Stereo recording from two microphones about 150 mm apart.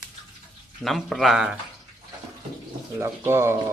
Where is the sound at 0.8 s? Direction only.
Centre (ahead or behind).